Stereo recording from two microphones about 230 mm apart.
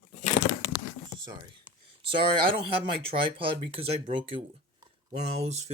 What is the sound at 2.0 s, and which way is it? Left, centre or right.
Speech, right.